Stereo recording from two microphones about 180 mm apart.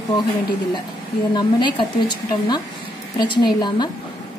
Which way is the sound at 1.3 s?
25° left (ahead or behind).